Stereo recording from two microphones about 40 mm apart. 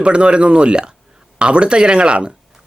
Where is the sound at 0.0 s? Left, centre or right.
Right.